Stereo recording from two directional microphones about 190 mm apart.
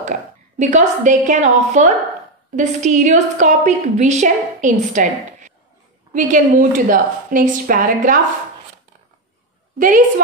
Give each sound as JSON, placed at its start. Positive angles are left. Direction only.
{"t": 0.0, "sound": "a woman's voice", "side_deg": -40}
{"t": 9.8, "sound": "a woman's voice", "side_deg": -45}